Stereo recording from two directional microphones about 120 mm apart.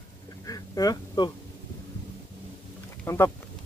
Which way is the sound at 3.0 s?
20° left (ahead or behind).